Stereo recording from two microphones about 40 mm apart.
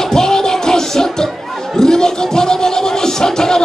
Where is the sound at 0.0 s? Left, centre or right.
Centre.